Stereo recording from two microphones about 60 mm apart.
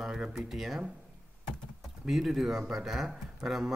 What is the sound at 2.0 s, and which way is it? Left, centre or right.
Speech, centre.